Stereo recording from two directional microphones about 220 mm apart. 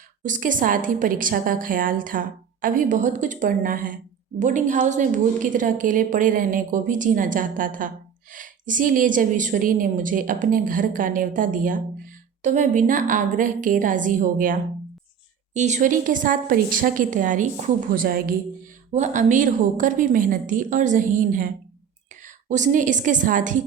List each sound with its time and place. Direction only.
0.2 s a woman's voice: 35° right (ahead or behind)